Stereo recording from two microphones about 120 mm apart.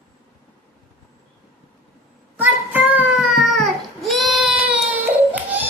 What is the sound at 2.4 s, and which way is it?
Child singing, 15° right (ahead or behind).